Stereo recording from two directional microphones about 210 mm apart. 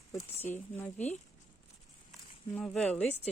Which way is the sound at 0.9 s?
35° left (ahead or behind).